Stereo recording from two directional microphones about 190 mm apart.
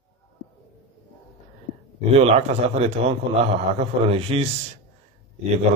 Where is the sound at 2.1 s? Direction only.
30° right (ahead or behind).